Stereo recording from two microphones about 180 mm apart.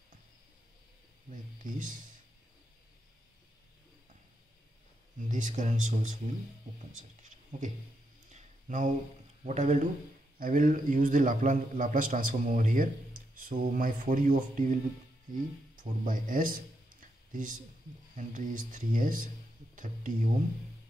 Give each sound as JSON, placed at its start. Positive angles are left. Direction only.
{"t": 1.3, "sound": "a man's voice", "side_deg": -45}
{"t": 5.3, "sound": "a man's voice", "side_deg": -45}
{"t": 8.3, "sound": "a sound", "side_deg": -40}
{"t": 9.4, "sound": "a man's voice", "side_deg": -40}
{"t": 17.0, "sound": "a sound", "side_deg": -45}
{"t": 18.1, "sound": "a man's voice", "side_deg": -45}